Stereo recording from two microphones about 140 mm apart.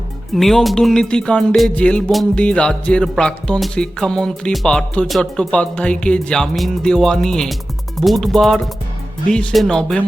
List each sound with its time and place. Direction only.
0.3 s speech: centre (ahead or behind)